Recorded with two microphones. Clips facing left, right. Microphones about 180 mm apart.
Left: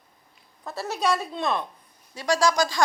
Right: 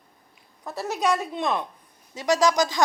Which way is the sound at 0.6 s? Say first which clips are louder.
Right 1 dB; 15° right (ahead or behind).